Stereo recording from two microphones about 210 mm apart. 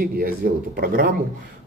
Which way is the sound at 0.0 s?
45° right (ahead or behind).